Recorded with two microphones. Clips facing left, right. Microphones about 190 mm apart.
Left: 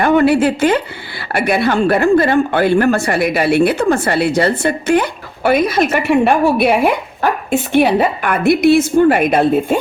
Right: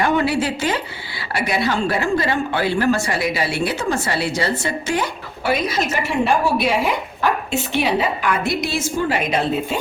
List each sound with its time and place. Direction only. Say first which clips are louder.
0.0 s a woman's voice: left 7 dB; 55° left (ahead or behind)